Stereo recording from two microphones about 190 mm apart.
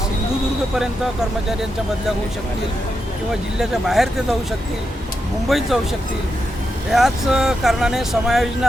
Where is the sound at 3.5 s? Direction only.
Centre (ahead or behind).